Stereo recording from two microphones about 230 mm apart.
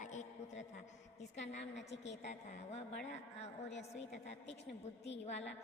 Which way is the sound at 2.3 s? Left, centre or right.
Left.